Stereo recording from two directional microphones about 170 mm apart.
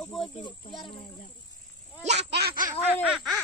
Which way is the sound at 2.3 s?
65° right (ahead or behind).